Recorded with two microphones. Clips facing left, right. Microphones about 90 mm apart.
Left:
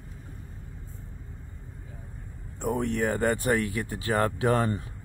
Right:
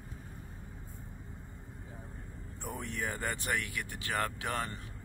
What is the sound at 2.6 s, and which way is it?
Speech, 60° left (ahead or behind).